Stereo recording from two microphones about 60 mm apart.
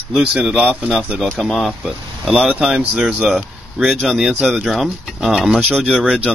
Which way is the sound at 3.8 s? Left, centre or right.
Centre.